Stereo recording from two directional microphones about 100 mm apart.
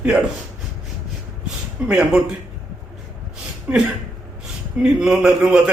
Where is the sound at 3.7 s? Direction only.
15° right (ahead or behind).